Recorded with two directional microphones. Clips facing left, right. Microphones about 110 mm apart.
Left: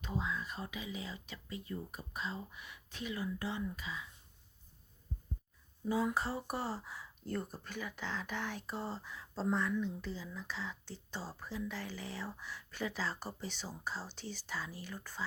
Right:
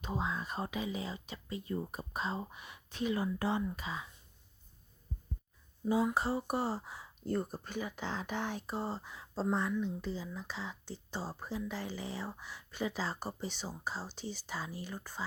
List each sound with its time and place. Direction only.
0.0 s speech: 25° right (ahead or behind)
0.3 s speech: 40° right (ahead or behind)
3.6 s speech: 30° right (ahead or behind)
5.8 s speech: 15° right (ahead or behind)